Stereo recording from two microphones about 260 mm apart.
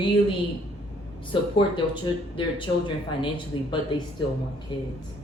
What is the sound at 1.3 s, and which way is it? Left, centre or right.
Speech, centre.